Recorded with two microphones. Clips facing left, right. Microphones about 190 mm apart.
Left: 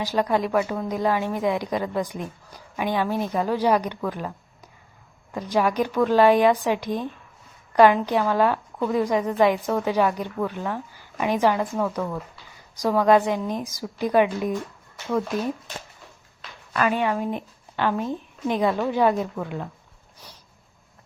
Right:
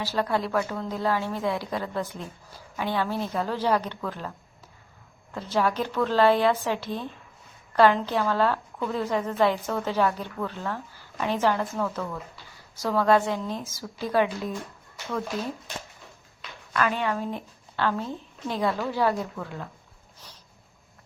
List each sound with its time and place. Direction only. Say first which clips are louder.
0.0 s a woman's voice: left 4 dB; 15° left (ahead or behind)
5.3 s a woman's voice: left 3 dB; 15° left (ahead or behind)
16.7 s a woman's voice: left 3 dB; 15° left (ahead or behind)
20.2 s a sound: left 3 dB; 10° left (ahead or behind)